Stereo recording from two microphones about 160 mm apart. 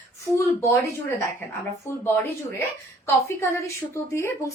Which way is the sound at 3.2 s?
20° left (ahead or behind).